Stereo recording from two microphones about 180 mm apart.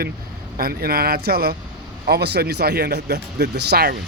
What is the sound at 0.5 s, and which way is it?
Speech, 55° right (ahead or behind).